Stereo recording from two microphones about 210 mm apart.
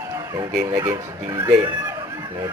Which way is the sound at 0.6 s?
15° right (ahead or behind).